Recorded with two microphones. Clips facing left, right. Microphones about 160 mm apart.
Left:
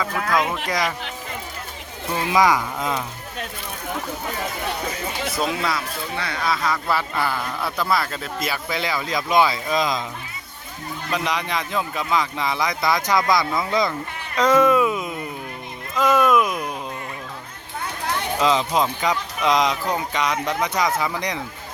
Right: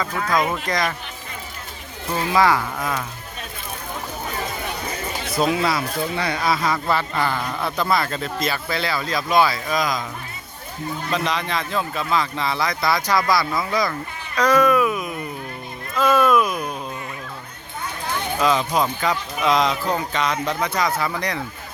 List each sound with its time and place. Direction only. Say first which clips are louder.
0.0 s speech: even; 5° left (ahead or behind)
2.3 s speech: even; 15° left (ahead or behind)
5.4 s speech: right 5 dB; 5° right (ahead or behind); by 10.0 s 25° left (ahead or behind)
11.1 s speech: even; 15° left (ahead or behind)
14.3 s a sound: even; 25° left (ahead or behind)
18.3 s speech: even; 20° left (ahead or behind)